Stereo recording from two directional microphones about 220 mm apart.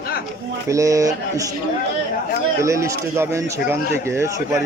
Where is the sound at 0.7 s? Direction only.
15° right (ahead or behind).